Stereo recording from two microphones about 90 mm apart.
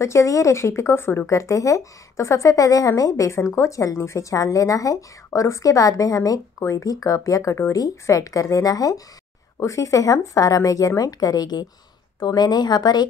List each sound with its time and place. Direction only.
0.0 s a woman's voice: 35° left (ahead or behind)